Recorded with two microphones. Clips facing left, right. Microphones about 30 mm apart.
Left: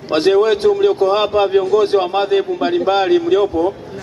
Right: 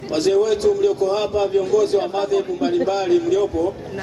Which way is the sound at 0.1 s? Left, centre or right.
Left.